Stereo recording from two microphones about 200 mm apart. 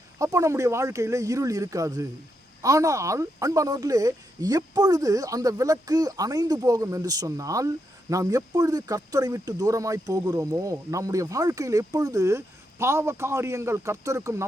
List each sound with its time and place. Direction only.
0.2 s speech: 15° right (ahead or behind)